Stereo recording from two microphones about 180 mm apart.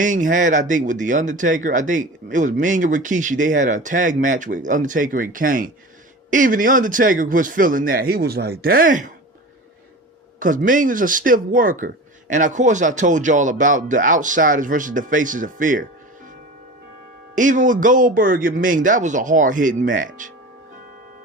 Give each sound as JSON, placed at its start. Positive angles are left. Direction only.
{"t": 0.0, "sound": "speech", "side_deg": -45}
{"t": 10.4, "sound": "speech", "side_deg": -45}
{"t": 17.3, "sound": "speech", "side_deg": -45}